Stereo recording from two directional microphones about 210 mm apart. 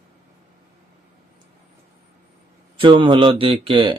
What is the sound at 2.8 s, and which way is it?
Speech, 25° right (ahead or behind).